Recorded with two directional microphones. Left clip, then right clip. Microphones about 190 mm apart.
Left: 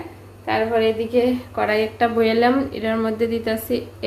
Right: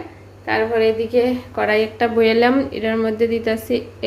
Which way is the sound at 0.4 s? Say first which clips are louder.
Right 2 dB; 5° right (ahead or behind).